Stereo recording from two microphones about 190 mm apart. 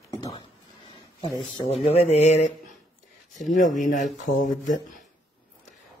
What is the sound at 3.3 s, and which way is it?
Speech, 40° left (ahead or behind).